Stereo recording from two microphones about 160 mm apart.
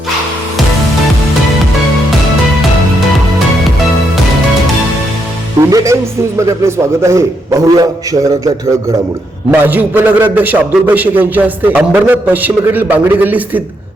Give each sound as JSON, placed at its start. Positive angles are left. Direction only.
{"t": 5.5, "sound": "a man's voice", "side_deg": -20}
{"t": 9.5, "sound": "a man's voice", "side_deg": -10}